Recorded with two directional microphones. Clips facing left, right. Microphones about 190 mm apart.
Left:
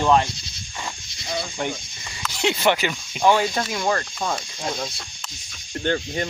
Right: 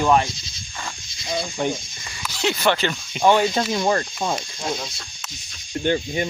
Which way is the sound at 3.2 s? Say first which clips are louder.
Right 2 dB; 5° right (ahead or behind).